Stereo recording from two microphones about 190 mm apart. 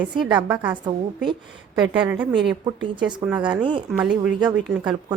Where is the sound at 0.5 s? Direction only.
10° right (ahead or behind).